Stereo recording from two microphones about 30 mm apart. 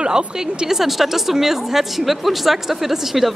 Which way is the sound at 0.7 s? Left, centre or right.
Centre.